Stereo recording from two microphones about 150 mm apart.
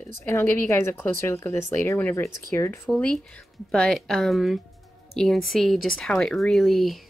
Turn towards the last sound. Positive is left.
turn(degrees=0)  # may be behind; listen again after turning